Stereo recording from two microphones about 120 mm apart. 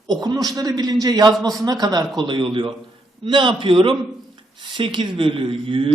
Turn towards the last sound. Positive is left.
turn(degrees=-50)  # may be behind; listen again after turning